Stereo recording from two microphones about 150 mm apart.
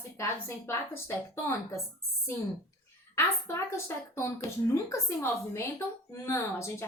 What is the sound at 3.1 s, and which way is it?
A woman's voice, 15° left (ahead or behind).